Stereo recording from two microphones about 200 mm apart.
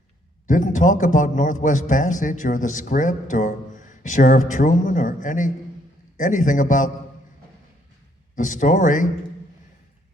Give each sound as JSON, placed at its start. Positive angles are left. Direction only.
{"t": 0.4, "sound": "a man's voice", "side_deg": 40}
{"t": 8.4, "sound": "a man's voice", "side_deg": 40}